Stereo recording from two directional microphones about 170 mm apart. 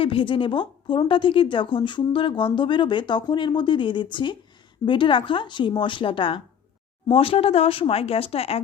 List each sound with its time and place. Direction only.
0.0 s a woman's voice: 30° left (ahead or behind)